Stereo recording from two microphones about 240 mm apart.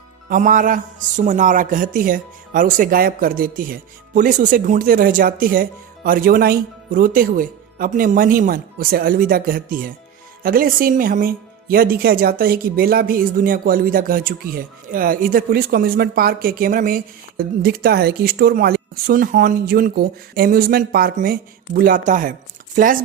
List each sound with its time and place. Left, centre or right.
0.3 s speech: right